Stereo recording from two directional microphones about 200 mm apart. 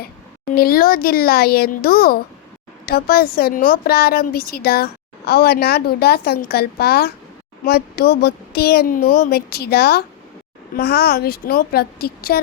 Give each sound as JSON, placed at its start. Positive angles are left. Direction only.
{"t": 0.5, "sound": "a woman's voice", "side_deg": 50}